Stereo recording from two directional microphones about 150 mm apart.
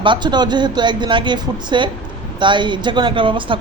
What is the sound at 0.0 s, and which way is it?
Speech, 30° right (ahead or behind).